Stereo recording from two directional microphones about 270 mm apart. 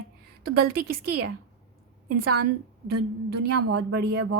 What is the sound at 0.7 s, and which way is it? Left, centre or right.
Speech, right.